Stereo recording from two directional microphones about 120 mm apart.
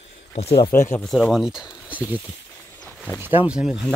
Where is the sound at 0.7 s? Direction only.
20° left (ahead or behind).